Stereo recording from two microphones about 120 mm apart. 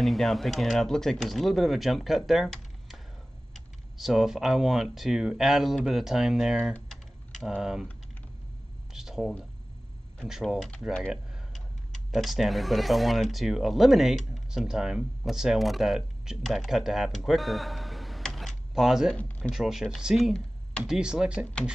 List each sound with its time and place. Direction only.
0.0 s speech: centre (ahead or behind)
6.9 s typing: centre (ahead or behind)
8.9 s a sound: 5° right (ahead or behind)
10.2 s speech: 5° right (ahead or behind)
19.1 s speech: 10° left (ahead or behind)
19.5 s speech: 5° right (ahead or behind)